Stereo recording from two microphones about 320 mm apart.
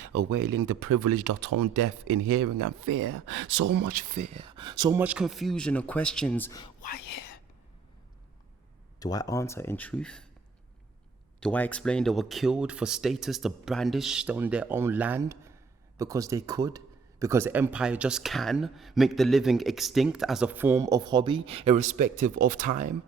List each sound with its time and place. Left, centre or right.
0.0 s speech: right
1.3 s speech: right
3.5 s speech: right; by 6.7 s centre
9.0 s speech: centre
11.3 s speech: centre; by 21.9 s right
21.9 s speech: right